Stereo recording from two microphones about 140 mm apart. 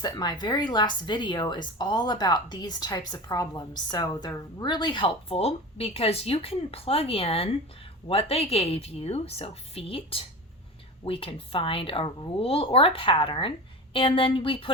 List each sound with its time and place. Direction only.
0.0 s a woman's voice: 30° left (ahead or behind)